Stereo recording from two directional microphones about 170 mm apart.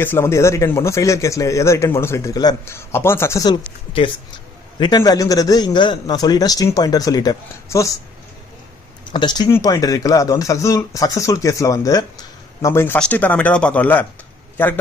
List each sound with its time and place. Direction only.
0.0 s a man's voice: 15° left (ahead or behind)
4.7 s speech: 25° left (ahead or behind)
9.0 s a man's voice: 25° left (ahead or behind); by 14.7 s 10° left (ahead or behind)